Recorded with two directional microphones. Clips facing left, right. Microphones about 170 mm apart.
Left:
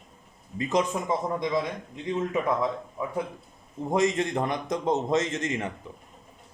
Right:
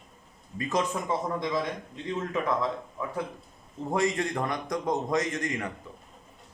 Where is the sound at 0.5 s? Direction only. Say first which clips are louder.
Left 3 dB; 20° left (ahead or behind).